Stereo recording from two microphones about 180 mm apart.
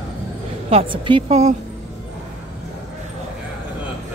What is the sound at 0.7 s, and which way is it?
Speech, 30° right (ahead or behind).